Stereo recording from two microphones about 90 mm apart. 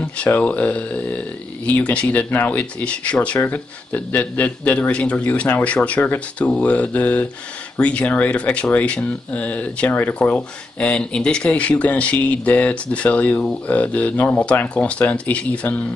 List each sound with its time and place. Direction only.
0.0 s speech: 15° left (ahead or behind)